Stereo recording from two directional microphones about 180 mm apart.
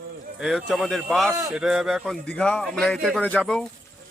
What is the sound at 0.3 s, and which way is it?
Speech, 5° right (ahead or behind).